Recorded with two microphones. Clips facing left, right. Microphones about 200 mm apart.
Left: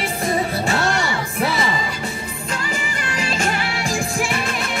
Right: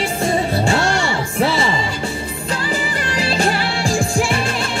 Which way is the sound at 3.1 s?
35° right (ahead or behind).